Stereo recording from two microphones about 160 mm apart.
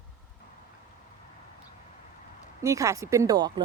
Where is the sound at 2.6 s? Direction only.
20° right (ahead or behind).